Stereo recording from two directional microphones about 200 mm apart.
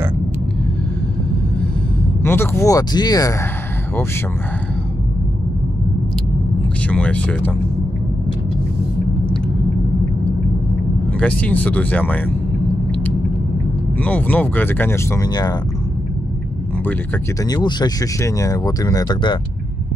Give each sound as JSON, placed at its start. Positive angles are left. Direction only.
{"t": 2.2, "sound": "speech", "side_deg": 10}
{"t": 6.9, "sound": "speech", "side_deg": 5}
{"t": 11.1, "sound": "speech", "side_deg": 5}
{"t": 14.0, "sound": "speech", "side_deg": 10}
{"t": 17.5, "sound": "speech", "side_deg": 20}